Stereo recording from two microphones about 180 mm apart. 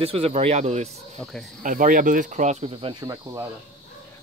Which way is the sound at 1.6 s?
50° right (ahead or behind).